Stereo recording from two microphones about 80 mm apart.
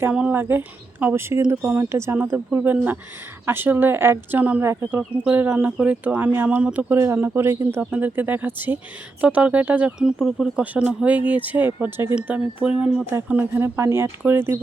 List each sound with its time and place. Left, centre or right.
0.1 s speech: centre
7.0 s speech: right
7.8 s speech: centre
10.8 s speech: centre
13.2 s speech: right